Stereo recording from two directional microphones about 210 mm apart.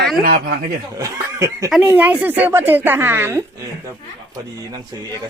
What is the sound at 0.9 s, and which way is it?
A woman's voice, 15° right (ahead or behind).